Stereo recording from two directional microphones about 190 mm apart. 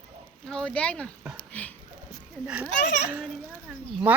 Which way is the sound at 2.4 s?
5° right (ahead or behind).